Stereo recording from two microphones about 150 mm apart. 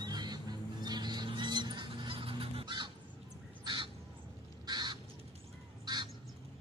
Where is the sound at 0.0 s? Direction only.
25° right (ahead or behind).